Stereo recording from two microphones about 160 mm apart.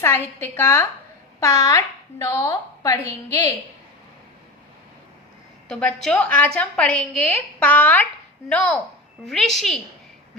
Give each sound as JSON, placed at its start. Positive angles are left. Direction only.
{"t": 0.0, "sound": "a woman's voice", "side_deg": 15}
{"t": 5.6, "sound": "a woman's voice", "side_deg": 5}